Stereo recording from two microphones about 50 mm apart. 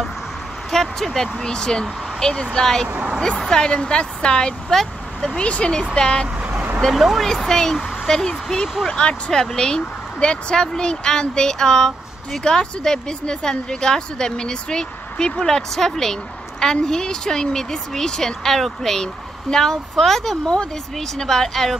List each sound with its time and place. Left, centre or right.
0.7 s speech: centre
4.7 s vehicle: centre
5.4 s speech: left
6.8 s speech: centre
7.2 s speech: centre